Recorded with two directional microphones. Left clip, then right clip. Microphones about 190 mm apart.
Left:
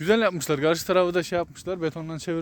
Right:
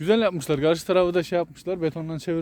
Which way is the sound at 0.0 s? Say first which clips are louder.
Even; centre (ahead or behind).